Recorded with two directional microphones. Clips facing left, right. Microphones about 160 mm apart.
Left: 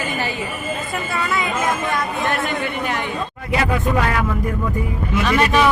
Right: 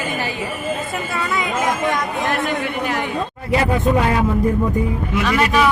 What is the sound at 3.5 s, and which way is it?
Speech, 30° right (ahead or behind).